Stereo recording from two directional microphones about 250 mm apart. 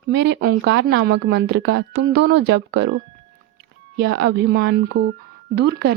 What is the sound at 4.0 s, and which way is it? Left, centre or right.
Speech, right.